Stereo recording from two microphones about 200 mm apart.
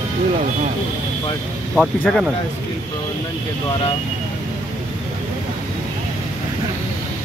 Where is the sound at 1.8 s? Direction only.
Centre (ahead or behind).